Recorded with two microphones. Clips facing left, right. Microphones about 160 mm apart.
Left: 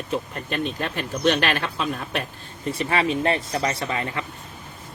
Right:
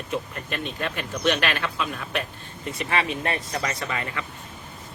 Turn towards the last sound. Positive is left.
turn(degrees=30)  # may be behind; listen again after turning